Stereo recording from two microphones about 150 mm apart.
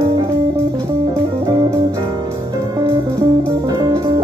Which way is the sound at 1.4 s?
25° right (ahead or behind).